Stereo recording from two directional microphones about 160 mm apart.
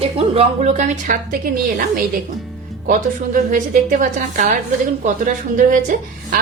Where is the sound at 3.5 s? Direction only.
55° right (ahead or behind).